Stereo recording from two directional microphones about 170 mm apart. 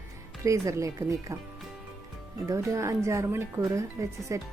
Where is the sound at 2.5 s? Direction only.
15° right (ahead or behind).